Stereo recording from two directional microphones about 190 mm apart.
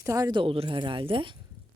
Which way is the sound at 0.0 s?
20° right (ahead or behind).